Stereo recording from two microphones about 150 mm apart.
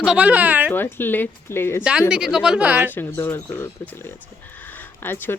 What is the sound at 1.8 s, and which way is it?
Speech, 5° right (ahead or behind).